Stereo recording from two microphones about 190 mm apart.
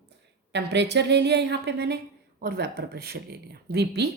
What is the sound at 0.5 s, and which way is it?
A woman's voice, 65° right (ahead or behind).